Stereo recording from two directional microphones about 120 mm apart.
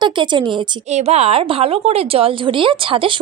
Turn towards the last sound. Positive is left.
turn(degrees=-45)  # may be behind; listen again after turning